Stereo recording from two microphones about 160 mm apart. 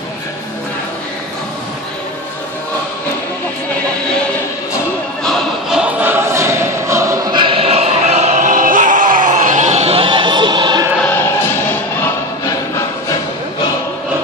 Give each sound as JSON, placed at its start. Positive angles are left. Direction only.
{"t": 5.2, "sound": "choir", "side_deg": 0}
{"t": 11.1, "sound": "music", "side_deg": 15}